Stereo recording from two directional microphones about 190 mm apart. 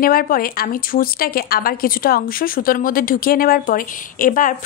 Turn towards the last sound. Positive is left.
turn(degrees=45)  # may be behind; listen again after turning